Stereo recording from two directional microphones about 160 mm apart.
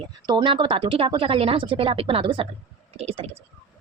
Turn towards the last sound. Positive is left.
turn(degrees=-40)  # may be behind; listen again after turning